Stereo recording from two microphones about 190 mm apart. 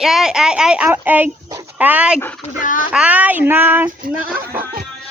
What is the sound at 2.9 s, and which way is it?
Child singing, 5° right (ahead or behind).